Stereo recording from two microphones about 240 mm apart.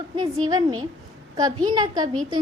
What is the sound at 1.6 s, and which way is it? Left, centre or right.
Speech, centre.